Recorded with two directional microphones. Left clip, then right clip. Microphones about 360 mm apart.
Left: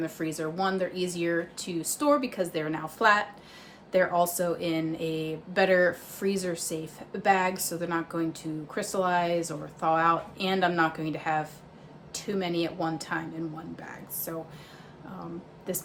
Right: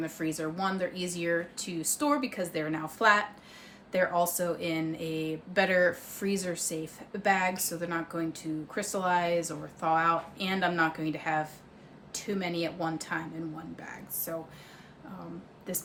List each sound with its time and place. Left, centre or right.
0.0 s speech: centre
15.7 s speech: centre